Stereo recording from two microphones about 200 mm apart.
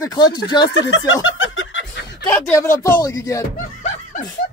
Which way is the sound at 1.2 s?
75° left (ahead or behind).